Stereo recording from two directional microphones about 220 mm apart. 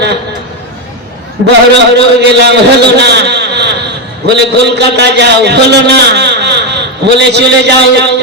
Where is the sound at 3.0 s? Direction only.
50° right (ahead or behind).